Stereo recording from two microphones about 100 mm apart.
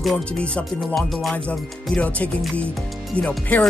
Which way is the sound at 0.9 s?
Centre (ahead or behind).